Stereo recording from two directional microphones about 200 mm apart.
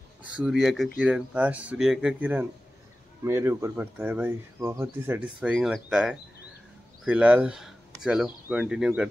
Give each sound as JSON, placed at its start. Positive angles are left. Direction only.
{"t": 0.2, "sound": "speech", "side_deg": -5}